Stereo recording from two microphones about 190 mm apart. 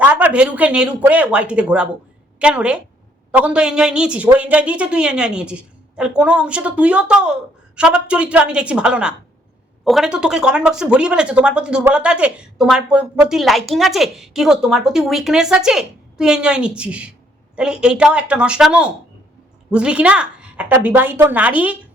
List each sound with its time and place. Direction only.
0.0 s a woman's voice: 10° right (ahead or behind)